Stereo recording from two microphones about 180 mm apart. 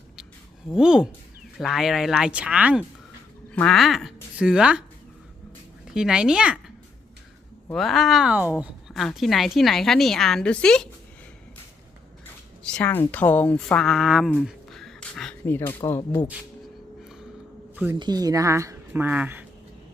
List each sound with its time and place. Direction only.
0.7 s speech: 5° right (ahead or behind)
3.5 s speech: 5° left (ahead or behind)
5.9 s speech: 5° right (ahead or behind)
7.7 s speech: centre (ahead or behind)
12.2 s speech: 5° left (ahead or behind)
14.3 s a sound: centre (ahead or behind)
18.0 s speech: 20° right (ahead or behind)